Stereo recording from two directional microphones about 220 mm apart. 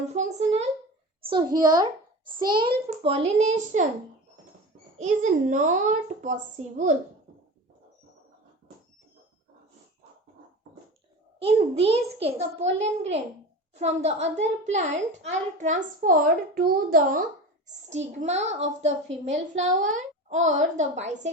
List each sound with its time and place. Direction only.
0.1 s a child's voice: 30° right (ahead or behind)
1.5 s a child's voice: 20° right (ahead or behind); by 3.8 s 35° right (ahead or behind)
4.9 s a woman's voice: 35° right (ahead or behind)
11.3 s a child's voice: 25° right (ahead or behind)